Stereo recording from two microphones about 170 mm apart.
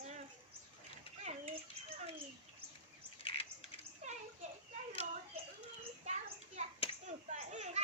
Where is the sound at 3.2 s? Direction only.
35° left (ahead or behind).